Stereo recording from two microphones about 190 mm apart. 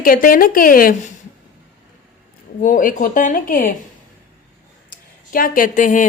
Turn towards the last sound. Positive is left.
turn(degrees=45)  # may be behind; listen again after turning